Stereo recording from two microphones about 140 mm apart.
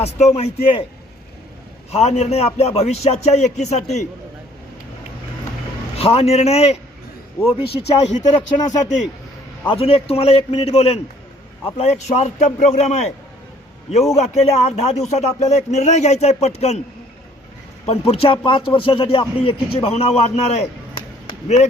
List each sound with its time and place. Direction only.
0.0 s speech: 50° left (ahead or behind)
1.9 s speech: 50° left (ahead or behind)
6.0 s speech: 45° left (ahead or behind)
9.6 s speech: 45° left (ahead or behind)
14.2 s speech: 45° left (ahead or behind)
17.8 s speech: 45° left (ahead or behind)